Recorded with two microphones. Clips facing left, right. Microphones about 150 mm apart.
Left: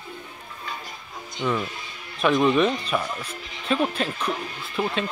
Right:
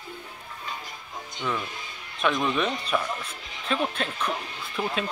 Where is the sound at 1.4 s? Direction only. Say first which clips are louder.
Left 5 dB; 5° left (ahead or behind).